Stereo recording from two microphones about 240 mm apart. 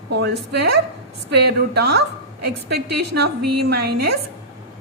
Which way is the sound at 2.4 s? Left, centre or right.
Right.